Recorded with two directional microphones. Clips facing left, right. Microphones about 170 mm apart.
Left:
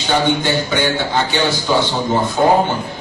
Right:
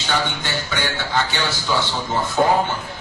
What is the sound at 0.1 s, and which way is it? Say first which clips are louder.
A man's voice: left 8 dB; 20° left (ahead or behind).